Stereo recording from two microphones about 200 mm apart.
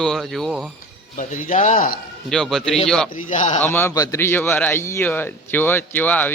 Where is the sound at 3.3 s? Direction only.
35° left (ahead or behind).